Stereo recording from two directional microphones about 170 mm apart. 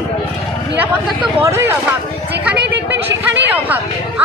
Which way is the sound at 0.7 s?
10° right (ahead or behind).